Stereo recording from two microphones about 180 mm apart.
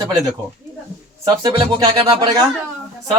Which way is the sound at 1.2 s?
20° right (ahead or behind).